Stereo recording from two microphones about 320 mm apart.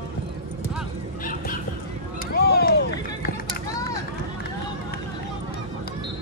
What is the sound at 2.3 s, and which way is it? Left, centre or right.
Run, left.